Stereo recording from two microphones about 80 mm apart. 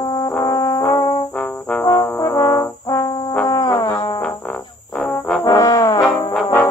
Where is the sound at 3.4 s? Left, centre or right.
Left.